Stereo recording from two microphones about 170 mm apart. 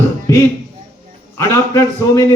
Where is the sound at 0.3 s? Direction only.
15° left (ahead or behind).